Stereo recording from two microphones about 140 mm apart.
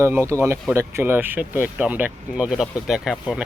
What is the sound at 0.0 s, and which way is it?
Speech, 20° right (ahead or behind).